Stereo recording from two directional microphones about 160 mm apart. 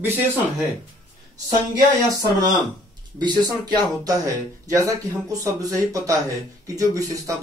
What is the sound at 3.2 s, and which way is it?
Speech, 25° right (ahead or behind).